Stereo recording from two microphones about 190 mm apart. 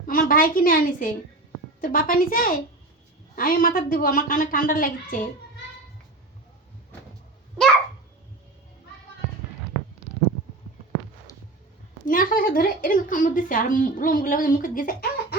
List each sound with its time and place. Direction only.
0.0 s a sound: 45° left (ahead or behind)
1.8 s a woman's voice: 45° left (ahead or behind)
11.3 s music: 15° left (ahead or behind)
12.0 s a woman's voice: 45° left (ahead or behind)